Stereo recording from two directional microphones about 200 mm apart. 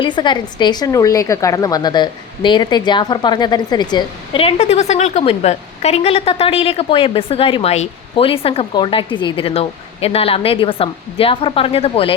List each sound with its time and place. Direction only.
0.0 s a woman's voice: 20° left (ahead or behind)